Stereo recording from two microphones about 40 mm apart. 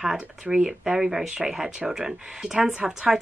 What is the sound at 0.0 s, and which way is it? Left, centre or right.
Speech, centre.